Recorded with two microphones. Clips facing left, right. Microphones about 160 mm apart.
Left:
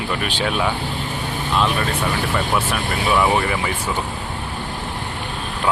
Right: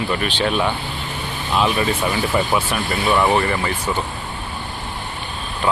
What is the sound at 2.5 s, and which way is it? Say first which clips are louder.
Speech: right 1 dB; centre (ahead or behind).